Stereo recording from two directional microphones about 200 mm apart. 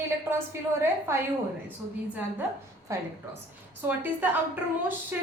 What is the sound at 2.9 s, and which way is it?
Speech, 15° right (ahead or behind).